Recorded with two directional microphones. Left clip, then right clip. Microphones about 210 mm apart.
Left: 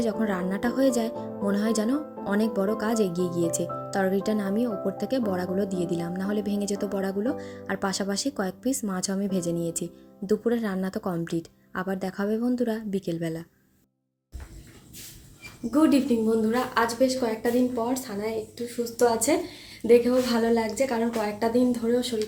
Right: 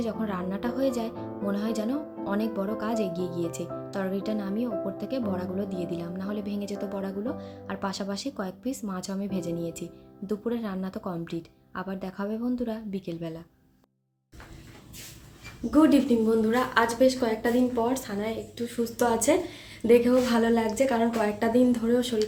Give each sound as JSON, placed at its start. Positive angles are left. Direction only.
{"t": 0.0, "sound": "speech", "side_deg": 25}
{"t": 15.7, "sound": "a woman's voice", "side_deg": 0}